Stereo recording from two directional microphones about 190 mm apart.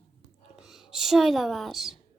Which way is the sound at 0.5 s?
Centre (ahead or behind).